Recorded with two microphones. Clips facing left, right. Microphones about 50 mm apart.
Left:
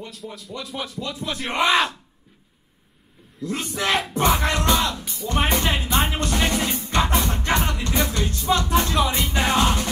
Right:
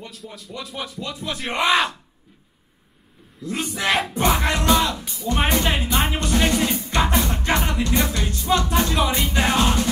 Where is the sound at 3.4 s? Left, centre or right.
Centre.